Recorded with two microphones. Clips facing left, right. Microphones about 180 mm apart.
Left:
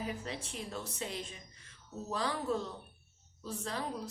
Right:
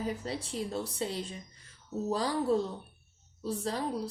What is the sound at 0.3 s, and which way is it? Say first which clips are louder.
A woman's voice: right 6 dB; 35° right (ahead or behind).